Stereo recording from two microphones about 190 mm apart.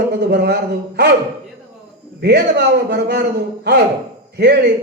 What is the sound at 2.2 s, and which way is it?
Speech, 60° right (ahead or behind).